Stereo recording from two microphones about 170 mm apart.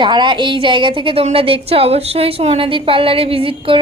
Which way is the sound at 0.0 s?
25° right (ahead or behind).